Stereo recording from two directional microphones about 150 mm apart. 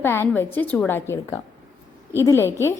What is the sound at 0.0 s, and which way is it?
A woman's voice, 15° left (ahead or behind).